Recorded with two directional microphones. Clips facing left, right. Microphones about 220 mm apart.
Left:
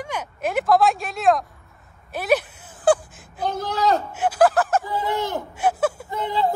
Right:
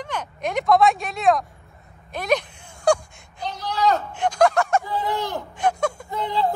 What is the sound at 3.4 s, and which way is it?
Speech, 50° left (ahead or behind).